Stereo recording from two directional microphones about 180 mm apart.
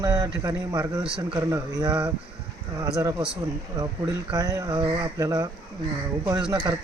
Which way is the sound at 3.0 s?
20° right (ahead or behind).